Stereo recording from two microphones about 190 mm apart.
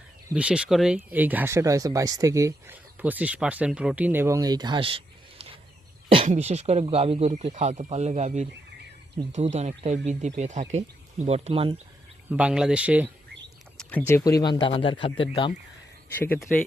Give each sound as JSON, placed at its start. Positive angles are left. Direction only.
{"t": 0.3, "sound": "speech", "side_deg": -5}
{"t": 12.3, "sound": "speech", "side_deg": -5}
{"t": 13.7, "sound": "speech", "side_deg": 10}
{"t": 16.1, "sound": "speech", "side_deg": 10}